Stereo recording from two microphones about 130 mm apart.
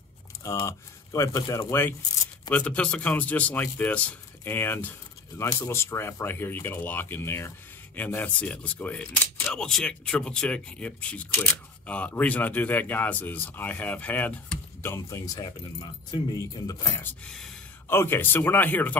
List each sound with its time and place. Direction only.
0.7 s speech: 25° left (ahead or behind)
17.0 s speech: 5° left (ahead or behind)
17.8 s speech: 15° left (ahead or behind)